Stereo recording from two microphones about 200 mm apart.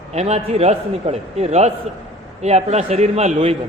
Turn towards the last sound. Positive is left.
turn(degrees=-30)  # may be behind; listen again after turning